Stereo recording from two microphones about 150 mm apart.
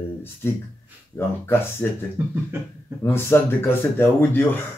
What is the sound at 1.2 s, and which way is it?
Speech, 15° left (ahead or behind).